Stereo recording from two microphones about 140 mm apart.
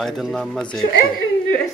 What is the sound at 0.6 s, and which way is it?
Speech, 35° left (ahead or behind).